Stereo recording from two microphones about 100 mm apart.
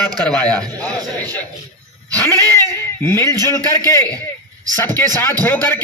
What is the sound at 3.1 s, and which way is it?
Speech, 30° left (ahead or behind).